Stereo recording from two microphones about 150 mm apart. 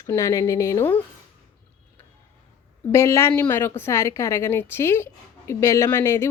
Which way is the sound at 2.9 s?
20° left (ahead or behind).